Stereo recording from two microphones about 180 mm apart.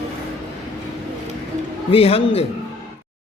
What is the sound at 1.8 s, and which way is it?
Speech, 30° left (ahead or behind).